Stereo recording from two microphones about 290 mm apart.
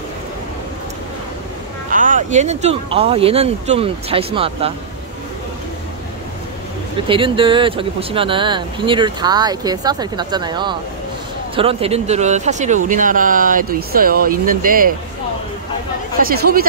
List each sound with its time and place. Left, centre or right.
1.9 s speech: right
7.1 s speech: centre
16.2 s speech: right